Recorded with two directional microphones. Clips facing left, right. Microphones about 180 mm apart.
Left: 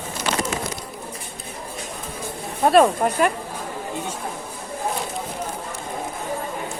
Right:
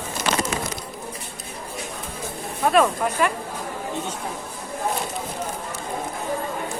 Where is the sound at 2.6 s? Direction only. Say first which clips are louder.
Left 4 dB; 35° left (ahead or behind).